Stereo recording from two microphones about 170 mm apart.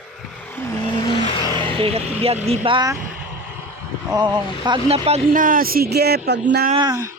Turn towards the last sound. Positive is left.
turn(degrees=-20)  # may be behind; listen again after turning